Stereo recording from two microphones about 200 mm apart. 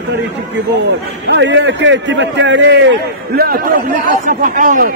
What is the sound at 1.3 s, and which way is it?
A man's voice, 65° right (ahead or behind).